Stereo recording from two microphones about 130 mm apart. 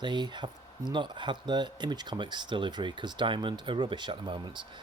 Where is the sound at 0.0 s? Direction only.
35° right (ahead or behind).